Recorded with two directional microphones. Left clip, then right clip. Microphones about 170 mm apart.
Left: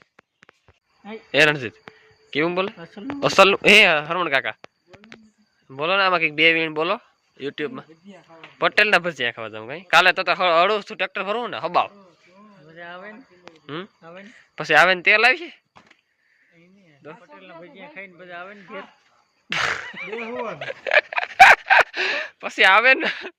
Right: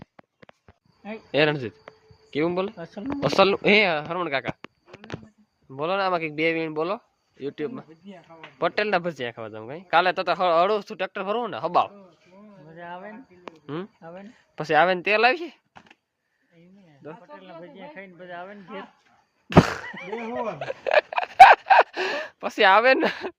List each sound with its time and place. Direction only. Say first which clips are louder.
1.3 s speech: left 5 dB; 10° right (ahead or behind)
2.7 s speech: right 2 dB; 35° right (ahead or behind)
3.2 s a man's voice: left 5 dB; 5° right (ahead or behind)
5.7 s a man's voice: left 5 dB; 10° right (ahead or behind)
12.7 s cricket: left 1 dB; 65° right (ahead or behind)
13.5 s a sound: left 1 dB; 25° right (ahead or behind)
14.2 s speech: left 3 dB; 20° right (ahead or behind)
17.3 s speech: even; 55° right (ahead or behind)
19.5 s a sound: right 3 dB; 25° right (ahead or behind)
19.9 s speech: left 2 dB; 60° right (ahead or behind)
20.3 s speech: even; 30° right (ahead or behind)